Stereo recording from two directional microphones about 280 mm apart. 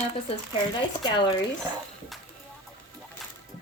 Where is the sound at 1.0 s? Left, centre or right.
Centre.